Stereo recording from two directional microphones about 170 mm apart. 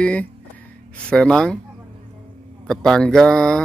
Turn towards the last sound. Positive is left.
turn(degrees=5)  # may be behind; listen again after turning